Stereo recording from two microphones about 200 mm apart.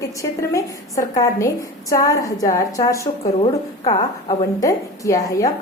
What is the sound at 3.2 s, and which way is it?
Speech, 30° left (ahead or behind).